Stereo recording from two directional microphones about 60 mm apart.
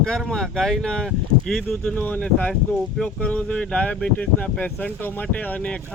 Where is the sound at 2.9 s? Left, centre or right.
Centre.